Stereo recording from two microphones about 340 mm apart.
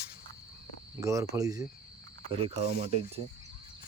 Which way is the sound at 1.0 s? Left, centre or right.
Centre.